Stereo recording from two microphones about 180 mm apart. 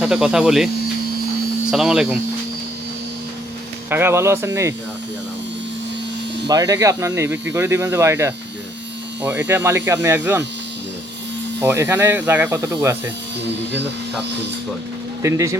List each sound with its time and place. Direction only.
0.0 s speech: 5° right (ahead or behind)
1.7 s speech: 5° right (ahead or behind)
3.8 s speech: 10° right (ahead or behind)
6.5 s speech: 20° right (ahead or behind)
11.6 s speech: 15° right (ahead or behind)
15.2 s speech: 15° right (ahead or behind)